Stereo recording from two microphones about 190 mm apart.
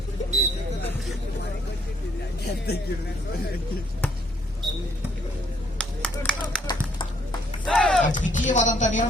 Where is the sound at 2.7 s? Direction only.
55° left (ahead or behind).